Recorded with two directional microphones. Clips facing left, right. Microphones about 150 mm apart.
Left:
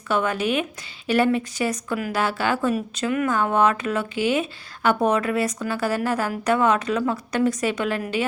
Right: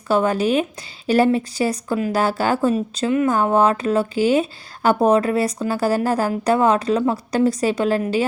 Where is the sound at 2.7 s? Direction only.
25° right (ahead or behind).